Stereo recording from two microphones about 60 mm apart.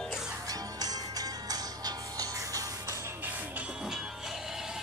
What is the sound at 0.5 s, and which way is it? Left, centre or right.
Music, right.